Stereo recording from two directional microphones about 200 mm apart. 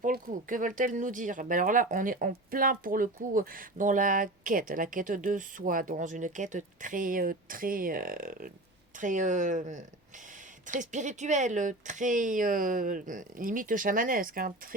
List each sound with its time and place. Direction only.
0.0 s speech: 40° right (ahead or behind)